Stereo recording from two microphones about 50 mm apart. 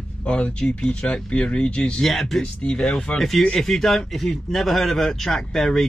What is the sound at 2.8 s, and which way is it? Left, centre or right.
A man's voice, centre.